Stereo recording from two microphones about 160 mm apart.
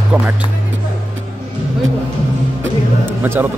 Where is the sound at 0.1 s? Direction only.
10° right (ahead or behind).